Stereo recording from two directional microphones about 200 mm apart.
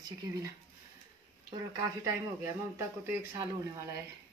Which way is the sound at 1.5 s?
15° right (ahead or behind).